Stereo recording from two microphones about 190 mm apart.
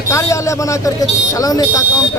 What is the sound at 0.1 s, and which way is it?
A man's voice, 15° left (ahead or behind).